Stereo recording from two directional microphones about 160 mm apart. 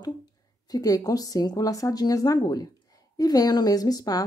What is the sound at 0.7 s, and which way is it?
Speech, 20° left (ahead or behind).